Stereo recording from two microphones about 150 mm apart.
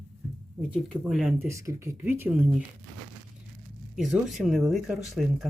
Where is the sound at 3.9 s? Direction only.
5° right (ahead or behind).